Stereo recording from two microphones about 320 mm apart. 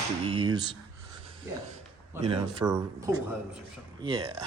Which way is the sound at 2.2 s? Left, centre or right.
Centre.